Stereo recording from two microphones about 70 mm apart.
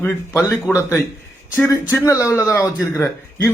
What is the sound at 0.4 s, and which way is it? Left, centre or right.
Speech, left.